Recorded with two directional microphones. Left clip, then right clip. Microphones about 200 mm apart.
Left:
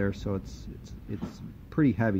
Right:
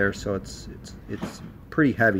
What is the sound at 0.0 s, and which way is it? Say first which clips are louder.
Speech: right 7 dB; 35° left (ahead or behind).